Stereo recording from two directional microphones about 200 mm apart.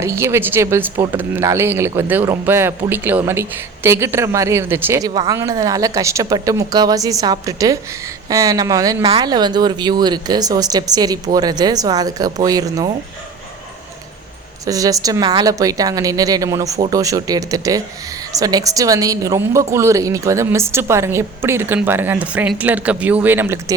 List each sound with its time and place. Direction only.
0.0 s a woman's voice: 15° right (ahead or behind)
14.6 s a woman's voice: 15° right (ahead or behind)